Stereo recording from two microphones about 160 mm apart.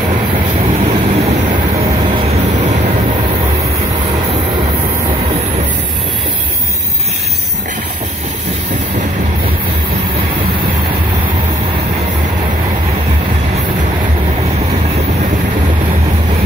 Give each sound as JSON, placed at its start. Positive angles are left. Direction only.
{"t": 0.7, "sound": "vehicle", "side_deg": -45}